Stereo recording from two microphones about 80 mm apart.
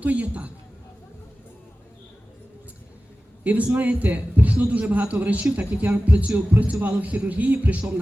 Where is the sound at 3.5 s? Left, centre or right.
Centre.